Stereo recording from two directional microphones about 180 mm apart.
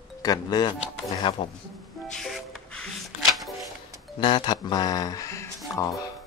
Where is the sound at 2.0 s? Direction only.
Centre (ahead or behind).